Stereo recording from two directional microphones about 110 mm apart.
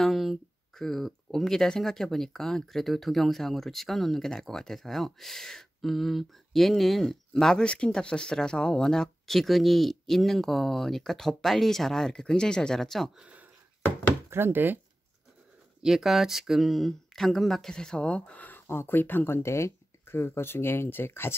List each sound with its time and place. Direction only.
0.0 s speech: centre (ahead or behind)
13.2 s a sound: 10° right (ahead or behind)
14.3 s speech: 20° right (ahead or behind)
15.8 s speech: 5° right (ahead or behind); by 21.4 s 20° left (ahead or behind)